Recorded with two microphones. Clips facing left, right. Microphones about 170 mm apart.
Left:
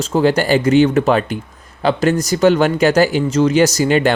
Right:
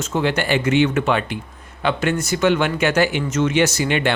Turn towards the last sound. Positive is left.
turn(degrees=40)  # may be behind; listen again after turning